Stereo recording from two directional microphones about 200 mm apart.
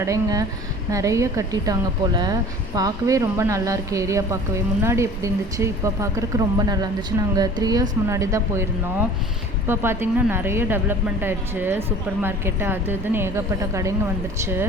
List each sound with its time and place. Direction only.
0.0 s a woman's voice: 15° right (ahead or behind)